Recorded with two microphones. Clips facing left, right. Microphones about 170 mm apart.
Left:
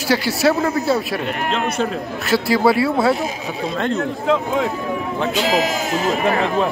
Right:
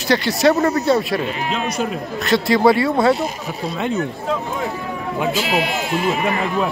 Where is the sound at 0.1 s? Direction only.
5° left (ahead or behind).